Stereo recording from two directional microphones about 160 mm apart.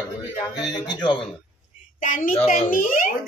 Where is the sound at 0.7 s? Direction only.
25° left (ahead or behind).